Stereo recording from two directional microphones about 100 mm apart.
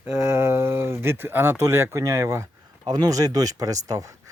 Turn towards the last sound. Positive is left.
turn(degrees=-35)  # may be behind; listen again after turning